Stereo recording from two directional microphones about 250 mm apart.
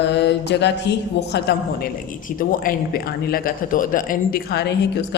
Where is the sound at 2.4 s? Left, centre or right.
Left.